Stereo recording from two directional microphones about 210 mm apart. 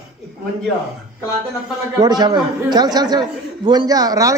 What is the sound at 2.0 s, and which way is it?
A man's voice, 20° right (ahead or behind).